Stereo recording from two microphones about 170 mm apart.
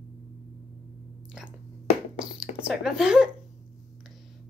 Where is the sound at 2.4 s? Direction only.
5° right (ahead or behind).